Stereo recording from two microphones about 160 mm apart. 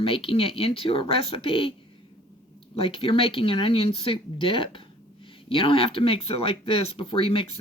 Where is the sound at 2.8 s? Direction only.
35° left (ahead or behind).